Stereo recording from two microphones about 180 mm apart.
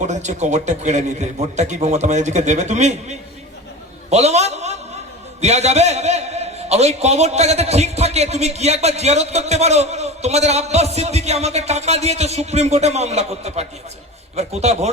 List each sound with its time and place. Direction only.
0.1 s a man's voice: 40° right (ahead or behind)